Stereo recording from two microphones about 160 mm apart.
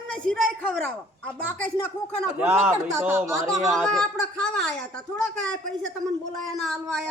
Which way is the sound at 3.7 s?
5° left (ahead or behind).